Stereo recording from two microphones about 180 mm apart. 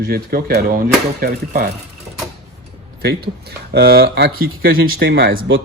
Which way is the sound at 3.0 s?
60° right (ahead or behind).